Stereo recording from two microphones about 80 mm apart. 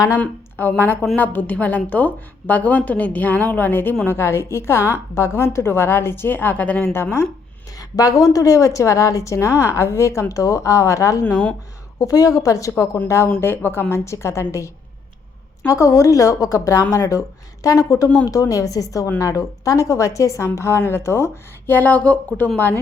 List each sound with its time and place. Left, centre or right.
0.2 s a woman's voice: left
6.9 s a woman's voice: left
7.8 s a woman's voice: left
11.3 s speech: centre
11.9 s a woman's voice: left
13.4 s a woman's voice: left
21.7 s a woman's voice: left